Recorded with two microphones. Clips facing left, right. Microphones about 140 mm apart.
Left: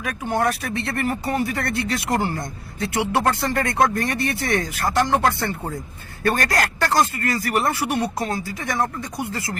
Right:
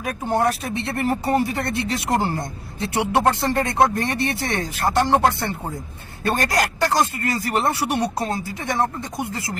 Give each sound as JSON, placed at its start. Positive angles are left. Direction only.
{"t": 0.0, "sound": "speech", "side_deg": -30}